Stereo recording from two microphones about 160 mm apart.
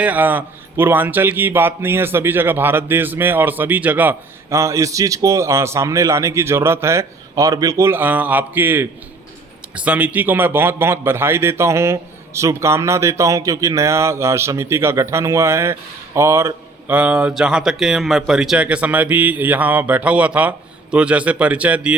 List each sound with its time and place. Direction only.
0.0 s a man's voice: 10° right (ahead or behind)